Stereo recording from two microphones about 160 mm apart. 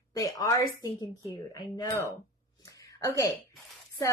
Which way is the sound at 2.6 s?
20° left (ahead or behind).